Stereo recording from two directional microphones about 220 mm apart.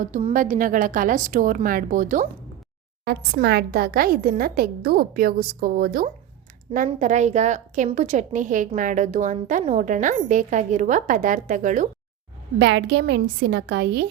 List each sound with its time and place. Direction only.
0.0 s a woman's voice: 30° right (ahead or behind)
3.0 s a woman's voice: 45° right (ahead or behind)
12.5 s a woman's voice: 55° right (ahead or behind)